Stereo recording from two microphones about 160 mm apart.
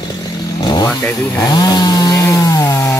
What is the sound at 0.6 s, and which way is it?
Chainsaw, 25° left (ahead or behind).